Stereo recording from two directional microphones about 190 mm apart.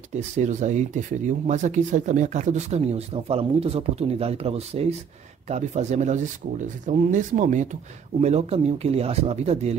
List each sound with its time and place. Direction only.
0.1 s speech: 40° right (ahead or behind)